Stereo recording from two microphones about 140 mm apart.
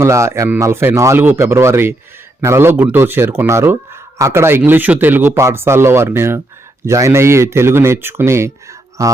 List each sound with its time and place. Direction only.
0.0 s a man's voice: 20° right (ahead or behind)